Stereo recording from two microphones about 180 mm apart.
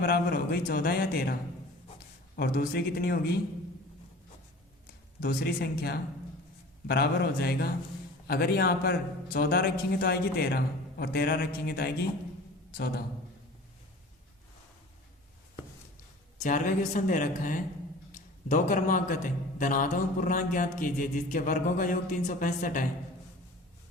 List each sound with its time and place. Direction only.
0.0 s a man's voice: 60° left (ahead or behind)
5.2 s a man's voice: 55° left (ahead or behind)
16.4 s a man's voice: 45° left (ahead or behind)